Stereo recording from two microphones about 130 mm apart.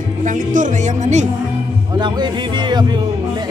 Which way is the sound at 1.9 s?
35° right (ahead or behind).